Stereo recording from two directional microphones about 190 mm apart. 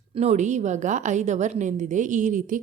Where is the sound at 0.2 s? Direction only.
35° right (ahead or behind).